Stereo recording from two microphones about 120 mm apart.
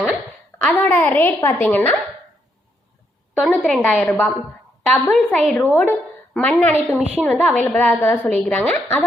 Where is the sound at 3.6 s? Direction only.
5° left (ahead or behind).